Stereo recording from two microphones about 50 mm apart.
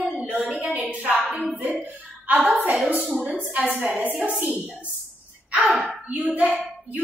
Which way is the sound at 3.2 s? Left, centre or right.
Right.